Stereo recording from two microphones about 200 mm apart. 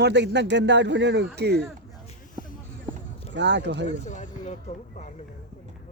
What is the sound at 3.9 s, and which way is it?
Speech, 35° left (ahead or behind).